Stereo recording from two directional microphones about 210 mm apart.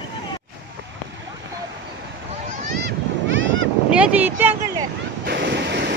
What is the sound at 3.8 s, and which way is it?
Speech, 5° right (ahead or behind).